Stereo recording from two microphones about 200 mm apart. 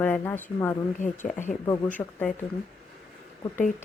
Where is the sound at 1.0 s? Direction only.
40° left (ahead or behind).